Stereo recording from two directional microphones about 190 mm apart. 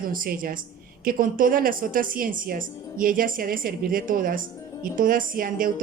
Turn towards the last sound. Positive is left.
turn(degrees=-50)  # may be behind; listen again after turning